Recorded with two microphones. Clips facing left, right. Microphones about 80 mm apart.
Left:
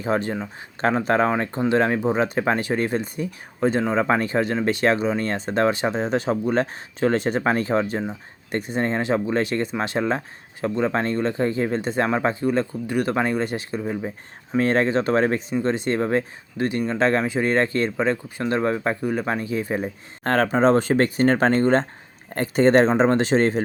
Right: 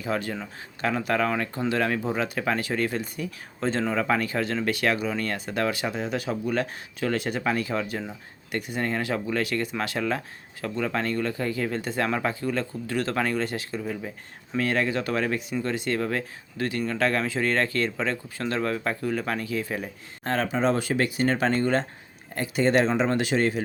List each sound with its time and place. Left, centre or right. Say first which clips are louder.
0.0 s speech: left 5 dB; left
20.2 s speech: left 6 dB; left